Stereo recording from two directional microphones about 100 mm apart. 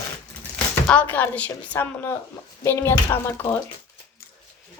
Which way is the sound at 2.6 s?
25° left (ahead or behind).